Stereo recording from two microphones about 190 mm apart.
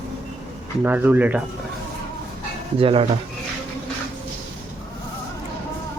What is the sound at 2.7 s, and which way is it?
Speech, 30° right (ahead or behind).